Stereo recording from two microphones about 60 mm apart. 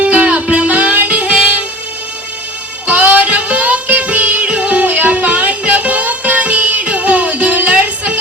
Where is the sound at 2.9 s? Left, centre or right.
Right.